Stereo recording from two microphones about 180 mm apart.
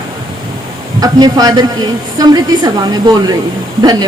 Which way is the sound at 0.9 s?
20° right (ahead or behind).